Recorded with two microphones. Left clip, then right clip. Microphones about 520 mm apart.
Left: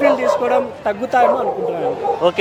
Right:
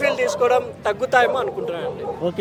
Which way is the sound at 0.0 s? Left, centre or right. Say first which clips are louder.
Left 4 dB; right.